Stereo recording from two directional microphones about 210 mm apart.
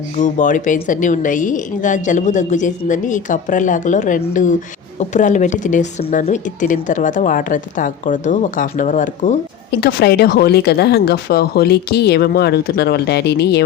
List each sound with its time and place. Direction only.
0.2 s speech: 35° left (ahead or behind)
9.8 s speech: 50° left (ahead or behind)